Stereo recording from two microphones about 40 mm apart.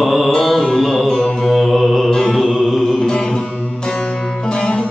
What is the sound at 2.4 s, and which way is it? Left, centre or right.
Chant, centre.